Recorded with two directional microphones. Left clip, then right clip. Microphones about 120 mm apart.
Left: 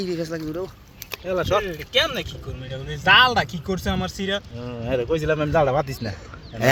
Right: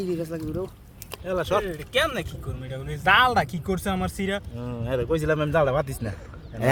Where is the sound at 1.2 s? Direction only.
35° left (ahead or behind).